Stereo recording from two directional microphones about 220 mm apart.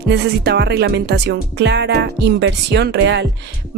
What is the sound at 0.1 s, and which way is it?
Speech, 50° right (ahead or behind).